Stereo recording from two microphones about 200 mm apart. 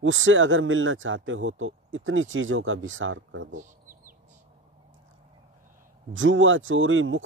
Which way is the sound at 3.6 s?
40° right (ahead or behind).